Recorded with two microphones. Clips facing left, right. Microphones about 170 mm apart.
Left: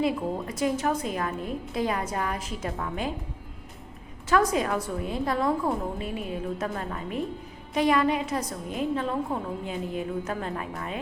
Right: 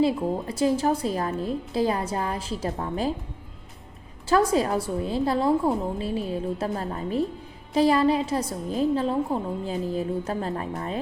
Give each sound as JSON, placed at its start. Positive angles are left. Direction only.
{"t": 0.4, "sound": "a woman's voice", "side_deg": -30}
{"t": 4.3, "sound": "a woman's voice", "side_deg": -30}